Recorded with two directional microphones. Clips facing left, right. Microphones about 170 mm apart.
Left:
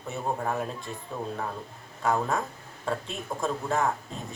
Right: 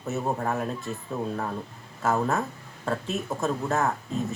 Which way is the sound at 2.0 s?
5° right (ahead or behind).